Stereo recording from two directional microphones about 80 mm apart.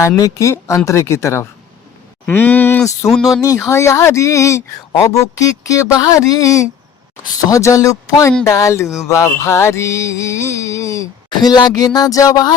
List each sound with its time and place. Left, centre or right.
0.2 s music: left
2.2 s speech: left
3.0 s music: left
7.5 s speech: left
8.4 s music: left
11.3 s a woman's voice: left